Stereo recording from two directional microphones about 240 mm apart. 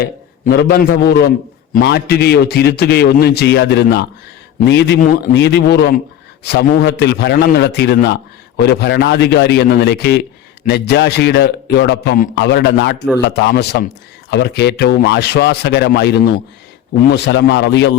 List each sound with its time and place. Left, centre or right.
0.0 s a man's voice: left